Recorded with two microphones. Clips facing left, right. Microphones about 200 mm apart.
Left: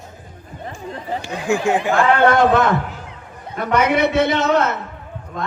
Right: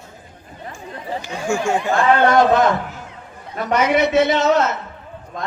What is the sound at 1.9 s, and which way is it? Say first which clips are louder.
A man's voice: right 1 dB; 60° left (ahead or behind).